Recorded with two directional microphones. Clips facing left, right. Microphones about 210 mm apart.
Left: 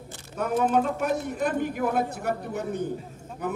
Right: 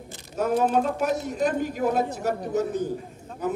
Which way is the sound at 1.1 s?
55° left (ahead or behind).